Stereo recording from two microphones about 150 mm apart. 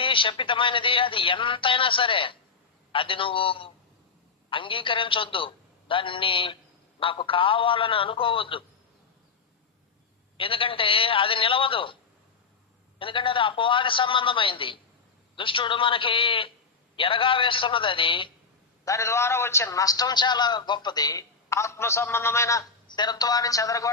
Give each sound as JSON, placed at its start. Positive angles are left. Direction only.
{"t": 0.0, "sound": "a man's voice", "side_deg": 35}
{"t": 10.3, "sound": "a man's voice", "side_deg": 35}
{"t": 13.0, "sound": "a man's voice", "side_deg": 35}
{"t": 18.9, "sound": "a man's voice", "side_deg": 20}